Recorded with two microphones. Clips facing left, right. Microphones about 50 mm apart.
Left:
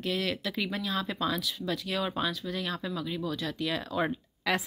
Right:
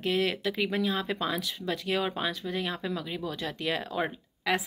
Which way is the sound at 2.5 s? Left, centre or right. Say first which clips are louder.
Right 2 dB; right.